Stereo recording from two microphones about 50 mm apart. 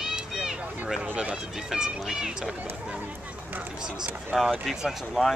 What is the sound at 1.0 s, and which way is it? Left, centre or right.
Speech, right.